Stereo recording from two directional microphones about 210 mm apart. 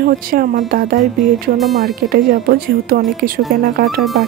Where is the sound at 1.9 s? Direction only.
45° right (ahead or behind).